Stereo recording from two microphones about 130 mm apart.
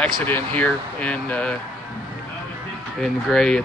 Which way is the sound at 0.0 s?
10° left (ahead or behind).